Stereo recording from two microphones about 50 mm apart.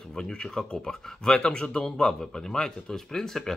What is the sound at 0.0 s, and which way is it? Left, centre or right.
Speech, centre.